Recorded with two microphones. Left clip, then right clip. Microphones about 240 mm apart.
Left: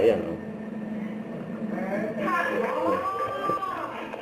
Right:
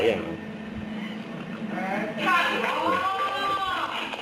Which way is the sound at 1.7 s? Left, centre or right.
Centre.